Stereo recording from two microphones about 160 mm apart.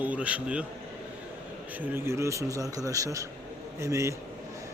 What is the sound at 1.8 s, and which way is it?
Speech, 15° right (ahead or behind).